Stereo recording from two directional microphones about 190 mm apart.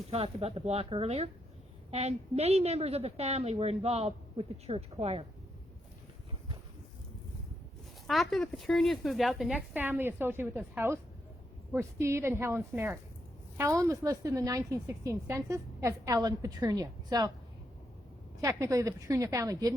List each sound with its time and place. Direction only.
0.1 s a woman's voice: 30° right (ahead or behind)
8.0 s a woman's voice: centre (ahead or behind); by 17.3 s 20° right (ahead or behind)
18.4 s a woman's voice: 15° right (ahead or behind)